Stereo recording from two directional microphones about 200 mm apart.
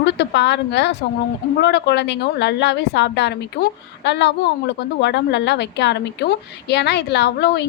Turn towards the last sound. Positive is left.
turn(degrees=55)  # may be behind; listen again after turning